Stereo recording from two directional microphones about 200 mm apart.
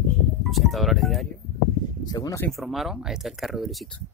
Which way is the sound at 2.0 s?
20° left (ahead or behind).